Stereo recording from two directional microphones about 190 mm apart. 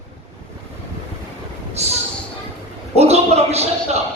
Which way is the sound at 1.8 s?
35° right (ahead or behind).